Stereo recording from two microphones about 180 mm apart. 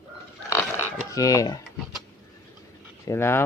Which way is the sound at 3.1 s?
15° left (ahead or behind).